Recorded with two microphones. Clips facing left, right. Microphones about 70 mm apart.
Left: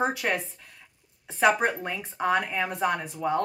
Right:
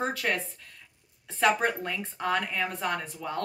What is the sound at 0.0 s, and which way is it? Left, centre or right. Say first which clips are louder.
Speech: left 3 dB; centre.